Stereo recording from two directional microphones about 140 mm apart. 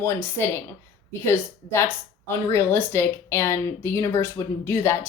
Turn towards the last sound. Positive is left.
turn(degrees=15)  # may be behind; listen again after turning